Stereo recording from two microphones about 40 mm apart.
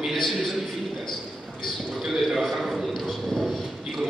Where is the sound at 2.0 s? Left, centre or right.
Centre.